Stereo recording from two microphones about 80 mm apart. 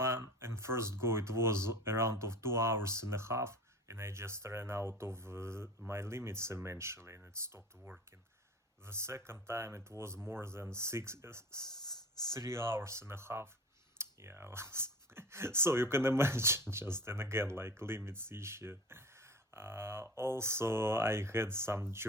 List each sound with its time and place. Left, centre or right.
0.0 s speech: right
8.8 s speech: right